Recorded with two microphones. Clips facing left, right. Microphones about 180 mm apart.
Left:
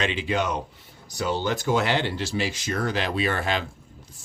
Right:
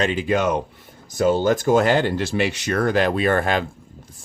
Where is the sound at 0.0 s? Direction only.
45° right (ahead or behind).